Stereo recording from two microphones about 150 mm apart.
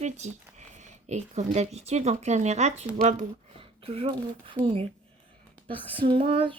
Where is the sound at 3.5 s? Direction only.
40° right (ahead or behind).